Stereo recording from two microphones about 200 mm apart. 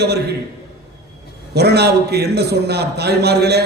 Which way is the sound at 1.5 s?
55° right (ahead or behind).